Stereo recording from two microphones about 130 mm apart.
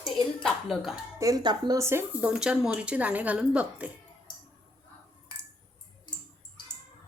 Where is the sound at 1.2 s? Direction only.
30° right (ahead or behind).